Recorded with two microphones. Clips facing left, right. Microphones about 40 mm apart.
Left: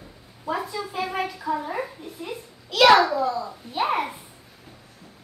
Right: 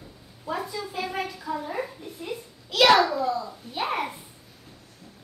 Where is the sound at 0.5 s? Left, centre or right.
Centre.